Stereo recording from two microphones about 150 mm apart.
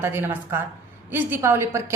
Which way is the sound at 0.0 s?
15° right (ahead or behind).